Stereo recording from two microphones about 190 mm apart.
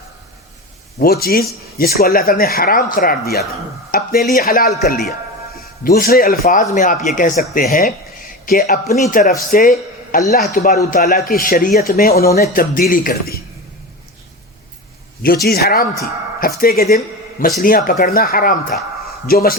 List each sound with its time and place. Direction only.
1.0 s a man's voice: 55° left (ahead or behind)
15.4 s a man's voice: 55° left (ahead or behind)